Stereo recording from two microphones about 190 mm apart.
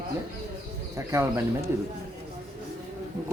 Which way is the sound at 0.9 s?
15° right (ahead or behind).